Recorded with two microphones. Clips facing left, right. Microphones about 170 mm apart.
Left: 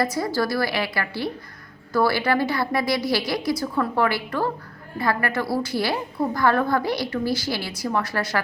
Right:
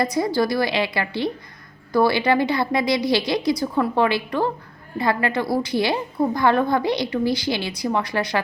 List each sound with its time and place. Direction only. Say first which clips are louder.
0.0 s a woman's voice: right 3 dB; 20° right (ahead or behind)